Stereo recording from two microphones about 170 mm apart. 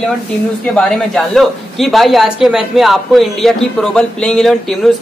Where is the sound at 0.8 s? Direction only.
5° left (ahead or behind).